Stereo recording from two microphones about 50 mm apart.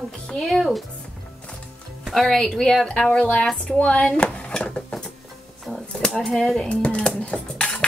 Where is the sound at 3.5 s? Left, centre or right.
Left.